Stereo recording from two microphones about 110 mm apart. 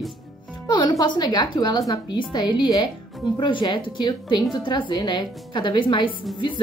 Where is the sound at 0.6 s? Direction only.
45° left (ahead or behind).